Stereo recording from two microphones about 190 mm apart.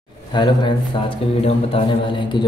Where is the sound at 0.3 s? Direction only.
25° left (ahead or behind).